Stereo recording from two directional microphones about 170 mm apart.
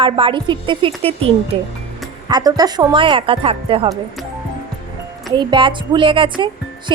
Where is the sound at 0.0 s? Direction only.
30° right (ahead or behind).